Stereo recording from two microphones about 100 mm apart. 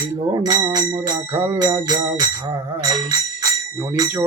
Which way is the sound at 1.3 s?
25° right (ahead or behind).